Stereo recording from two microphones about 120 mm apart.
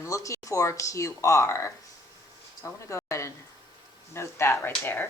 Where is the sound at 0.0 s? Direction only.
25° left (ahead or behind).